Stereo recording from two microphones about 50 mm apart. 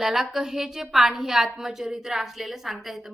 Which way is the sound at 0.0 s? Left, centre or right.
Centre.